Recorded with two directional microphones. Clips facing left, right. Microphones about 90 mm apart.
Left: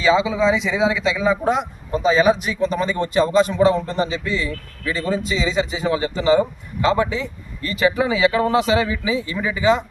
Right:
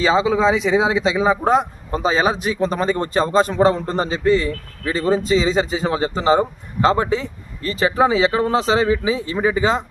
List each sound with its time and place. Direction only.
0.0 s speech: 35° right (ahead or behind)